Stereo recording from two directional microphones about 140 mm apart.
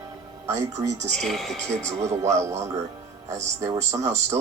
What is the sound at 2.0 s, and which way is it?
Speech, 20° right (ahead or behind).